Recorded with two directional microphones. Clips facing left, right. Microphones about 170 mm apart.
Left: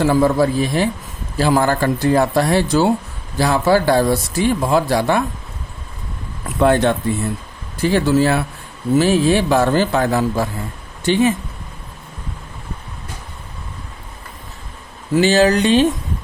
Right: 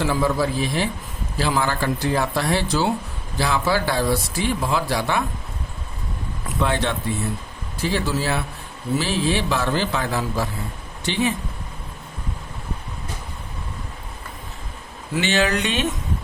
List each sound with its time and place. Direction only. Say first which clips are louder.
0.0 s speech: left 7 dB; 45° left (ahead or behind)
6.6 s speech: left 9 dB; 50° left (ahead or behind)
15.1 s speech: left 8 dB; 40° left (ahead or behind)